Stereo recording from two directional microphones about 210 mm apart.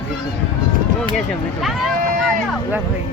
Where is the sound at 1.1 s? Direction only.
Centre (ahead or behind).